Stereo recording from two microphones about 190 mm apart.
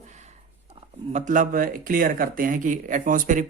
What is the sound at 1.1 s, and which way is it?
Speech, 40° right (ahead or behind).